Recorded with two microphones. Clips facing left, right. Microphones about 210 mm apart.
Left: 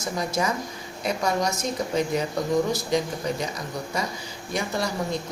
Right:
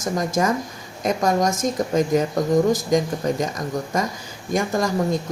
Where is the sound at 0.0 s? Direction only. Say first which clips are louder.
Right 5 dB; 50° right (ahead or behind).